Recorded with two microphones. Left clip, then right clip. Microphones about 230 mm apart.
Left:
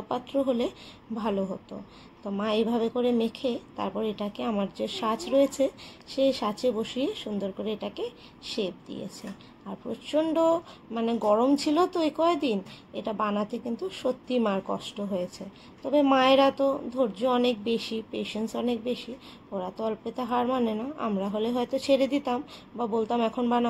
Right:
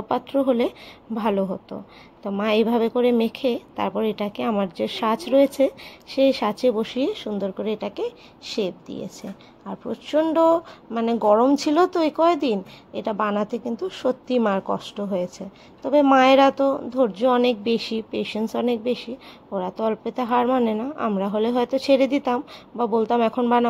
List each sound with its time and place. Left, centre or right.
0.1 s a woman's voice: right